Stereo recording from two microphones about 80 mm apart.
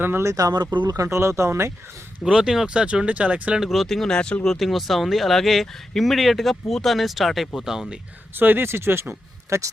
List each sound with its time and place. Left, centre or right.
0.0 s speech: right
1.0 s speech: right
2.2 s speech: centre
3.6 s speech: centre
4.5 s speech: centre
8.4 s speech: right